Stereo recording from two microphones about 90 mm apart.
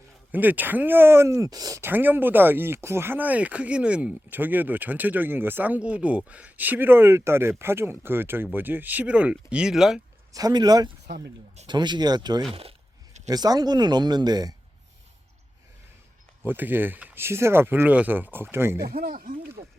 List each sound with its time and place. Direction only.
0.3 s speech: 20° right (ahead or behind); by 1.8 s 45° right (ahead or behind)
1.8 s speech: 20° right (ahead or behind); by 10.0 s 5° right (ahead or behind)
10.3 s speech: 45° right (ahead or behind)
16.4 s speech: 20° right (ahead or behind)
17.2 s speech: 30° right (ahead or behind)